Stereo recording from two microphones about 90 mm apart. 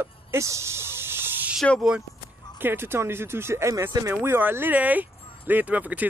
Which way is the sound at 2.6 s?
25° right (ahead or behind).